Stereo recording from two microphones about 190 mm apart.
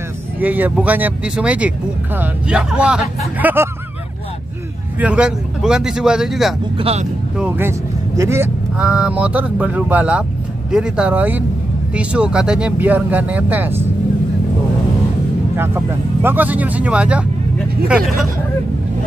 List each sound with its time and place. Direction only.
0.4 s speech: 10° right (ahead or behind)
4.9 s speech: 5° right (ahead or behind)
6.8 s speech: 30° right (ahead or behind)
7.3 s speech: 10° right (ahead or behind)
15.5 s speech: 10° right (ahead or behind)